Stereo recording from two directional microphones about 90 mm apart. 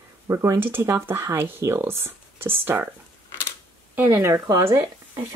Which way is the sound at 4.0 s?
25° right (ahead or behind).